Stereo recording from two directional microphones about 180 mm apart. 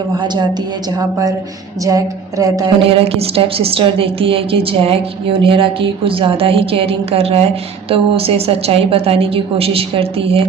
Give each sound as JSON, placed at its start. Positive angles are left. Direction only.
{"t": 2.7, "sound": "a woman's voice", "side_deg": -30}